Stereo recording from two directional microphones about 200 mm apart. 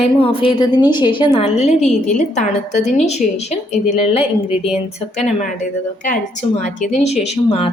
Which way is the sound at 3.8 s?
5° right (ahead or behind).